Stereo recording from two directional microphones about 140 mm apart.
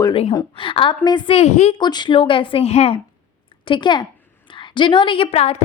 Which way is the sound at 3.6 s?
35° left (ahead or behind).